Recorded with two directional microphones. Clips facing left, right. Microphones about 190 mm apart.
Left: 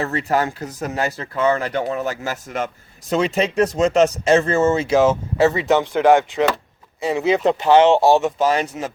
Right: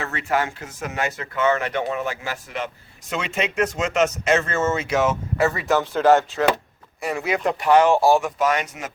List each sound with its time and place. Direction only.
0.0 s speech: 35° left (ahead or behind)